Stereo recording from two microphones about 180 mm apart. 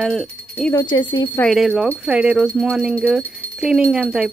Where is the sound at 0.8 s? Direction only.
25° left (ahead or behind).